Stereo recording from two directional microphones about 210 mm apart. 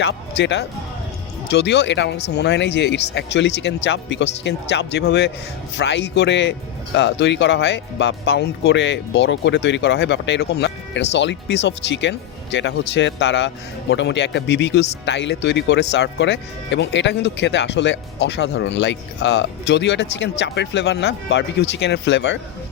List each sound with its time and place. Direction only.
0.0 s speech: 55° left (ahead or behind)